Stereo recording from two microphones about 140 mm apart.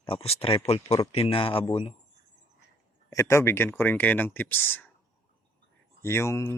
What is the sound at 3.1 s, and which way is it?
Speech, 20° left (ahead or behind).